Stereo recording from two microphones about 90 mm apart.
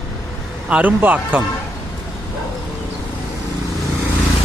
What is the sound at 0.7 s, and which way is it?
Speech, 20° right (ahead or behind).